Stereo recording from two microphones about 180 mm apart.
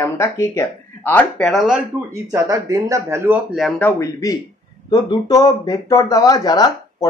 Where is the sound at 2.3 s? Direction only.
20° right (ahead or behind); by 3.9 s centre (ahead or behind).